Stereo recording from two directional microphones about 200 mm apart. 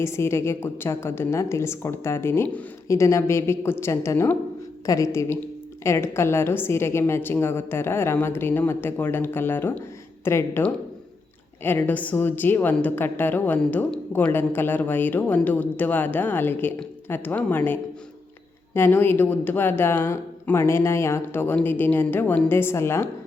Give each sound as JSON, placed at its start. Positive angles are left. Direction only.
{"t": 0.0, "sound": "a woman's voice", "side_deg": 15}